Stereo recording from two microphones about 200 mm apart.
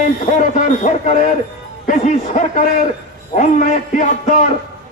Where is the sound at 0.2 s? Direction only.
40° left (ahead or behind).